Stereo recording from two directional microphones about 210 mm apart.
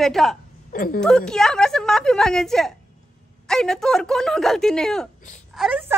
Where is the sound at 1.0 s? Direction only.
5° left (ahead or behind).